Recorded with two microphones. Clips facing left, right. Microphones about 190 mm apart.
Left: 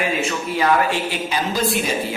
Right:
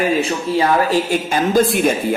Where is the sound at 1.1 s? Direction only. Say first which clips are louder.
Right 8 dB; 50° right (ahead or behind).